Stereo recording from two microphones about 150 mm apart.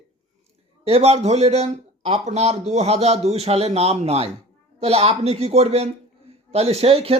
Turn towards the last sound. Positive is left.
turn(degrees=-40)  # may be behind; listen again after turning